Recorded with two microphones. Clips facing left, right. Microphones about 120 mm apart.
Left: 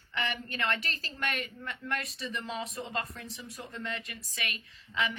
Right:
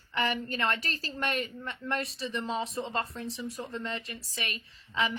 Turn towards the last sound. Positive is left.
turn(degrees=-35)  # may be behind; listen again after turning